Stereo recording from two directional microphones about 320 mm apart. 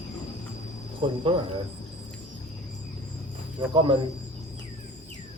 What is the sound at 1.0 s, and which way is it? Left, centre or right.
Speech, centre.